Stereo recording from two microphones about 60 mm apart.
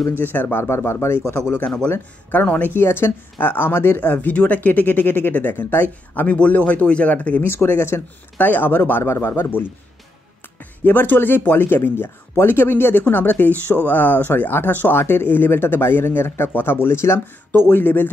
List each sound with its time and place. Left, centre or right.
0.1 s speech: left
0.7 s speech: left
1.8 s speech: left
6.2 s speech: left
7.4 s speech: left
8.4 s speech: left
9.0 s speech: left
17.5 s speech: left